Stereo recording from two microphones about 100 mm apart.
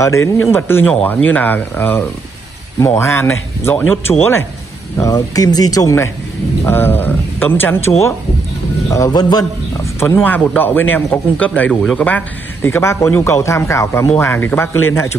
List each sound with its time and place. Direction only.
0.0 s a man's voice: 30° left (ahead or behind)
6.6 s a man's voice: 20° left (ahead or behind)
8.9 s speech: 35° left (ahead or behind)
9.9 s speech: 25° left (ahead or behind)
11.8 s a man's voice: 5° left (ahead or behind)
12.6 s a man's voice: 25° left (ahead or behind)